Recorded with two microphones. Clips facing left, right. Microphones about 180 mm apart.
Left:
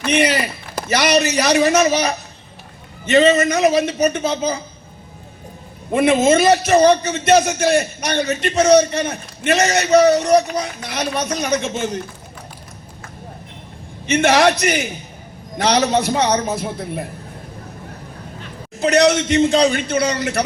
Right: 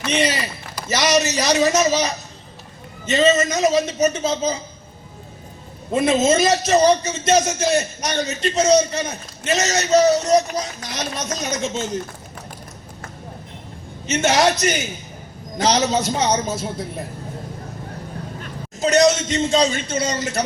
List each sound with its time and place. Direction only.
0.1 s a man's voice: 60° left (ahead or behind)
6.0 s a man's voice: 60° left (ahead or behind)
14.1 s a man's voice: 60° left (ahead or behind)
18.8 s a man's voice: 60° left (ahead or behind)